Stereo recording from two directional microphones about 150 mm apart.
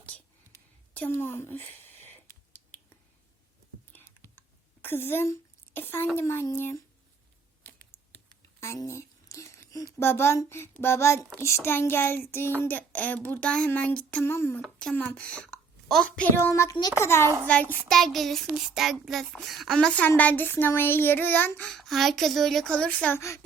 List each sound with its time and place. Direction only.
0.1 s a sound: 5° left (ahead or behind)
3.9 s whispering: 15° left (ahead or behind)
6.1 s child singing: 15° left (ahead or behind)
8.4 s a sound: 20° left (ahead or behind)
10.0 s child singing: 15° left (ahead or behind)
14.6 s a woman's voice: 5° left (ahead or behind)
17.0 s child singing: 15° left (ahead or behind)
21.7 s a woman's voice: centre (ahead or behind); by 23.4 s 15° left (ahead or behind)